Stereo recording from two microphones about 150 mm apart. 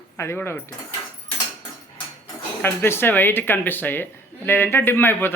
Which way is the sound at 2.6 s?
15° left (ahead or behind).